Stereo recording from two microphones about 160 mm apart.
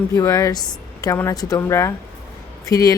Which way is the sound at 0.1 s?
20° left (ahead or behind).